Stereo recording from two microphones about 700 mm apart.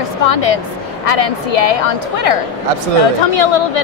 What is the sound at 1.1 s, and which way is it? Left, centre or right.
A woman's voice, left.